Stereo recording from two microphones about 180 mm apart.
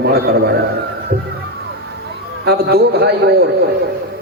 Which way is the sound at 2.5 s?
65° right (ahead or behind).